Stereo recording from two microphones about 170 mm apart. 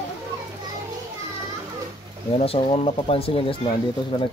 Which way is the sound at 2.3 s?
35° left (ahead or behind).